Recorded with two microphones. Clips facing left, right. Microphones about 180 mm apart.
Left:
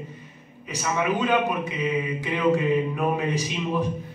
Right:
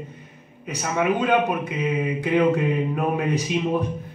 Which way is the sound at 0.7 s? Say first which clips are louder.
Right 2 dB; 55° right (ahead or behind).